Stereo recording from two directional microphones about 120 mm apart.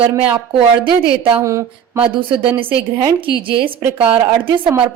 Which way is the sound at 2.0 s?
45° right (ahead or behind).